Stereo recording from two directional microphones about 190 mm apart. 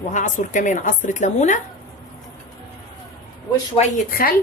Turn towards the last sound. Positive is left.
turn(degrees=50)  # may be behind; listen again after turning